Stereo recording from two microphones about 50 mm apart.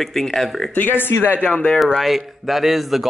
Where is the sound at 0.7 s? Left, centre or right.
Left.